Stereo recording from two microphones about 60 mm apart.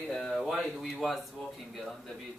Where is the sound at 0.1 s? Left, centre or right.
Centre.